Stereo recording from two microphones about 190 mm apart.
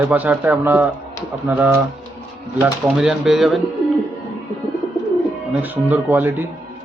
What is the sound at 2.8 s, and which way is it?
Speech, centre (ahead or behind).